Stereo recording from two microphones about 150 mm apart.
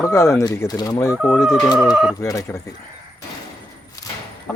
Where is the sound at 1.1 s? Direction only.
5° right (ahead or behind).